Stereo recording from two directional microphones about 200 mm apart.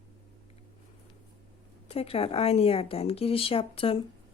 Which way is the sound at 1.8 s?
30° left (ahead or behind).